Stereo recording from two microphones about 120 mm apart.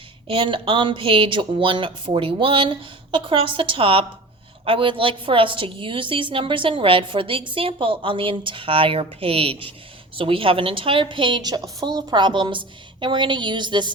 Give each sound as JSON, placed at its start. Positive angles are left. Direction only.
{"t": 0.3, "sound": "a woman's voice", "side_deg": -45}